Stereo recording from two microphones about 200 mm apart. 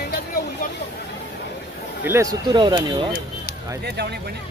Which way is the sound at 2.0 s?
15° right (ahead or behind).